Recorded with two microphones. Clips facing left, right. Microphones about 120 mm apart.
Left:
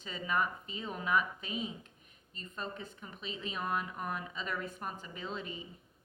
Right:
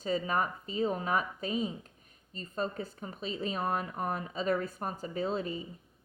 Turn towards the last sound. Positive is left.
turn(degrees=-35)  # may be behind; listen again after turning